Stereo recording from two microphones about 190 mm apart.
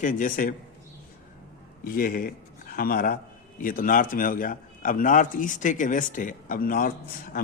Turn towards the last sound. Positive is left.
turn(degrees=50)  # may be behind; listen again after turning